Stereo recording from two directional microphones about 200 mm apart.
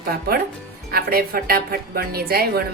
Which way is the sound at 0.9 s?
45° right (ahead or behind).